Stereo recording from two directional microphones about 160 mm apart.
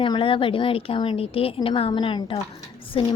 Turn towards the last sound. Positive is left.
turn(degrees=35)  # may be behind; listen again after turning